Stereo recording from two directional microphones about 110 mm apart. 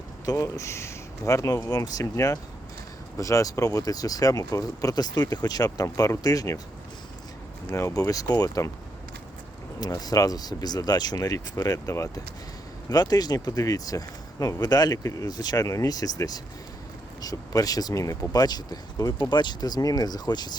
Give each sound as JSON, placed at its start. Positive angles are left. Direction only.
{"t": 0.3, "sound": "speech", "side_deg": 30}
{"t": 7.7, "sound": "speech", "side_deg": 30}
{"t": 9.8, "sound": "speech", "side_deg": 35}